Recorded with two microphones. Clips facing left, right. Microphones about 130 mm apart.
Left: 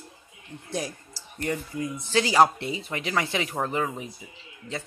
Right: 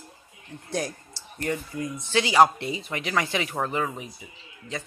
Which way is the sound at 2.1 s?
35° left (ahead or behind).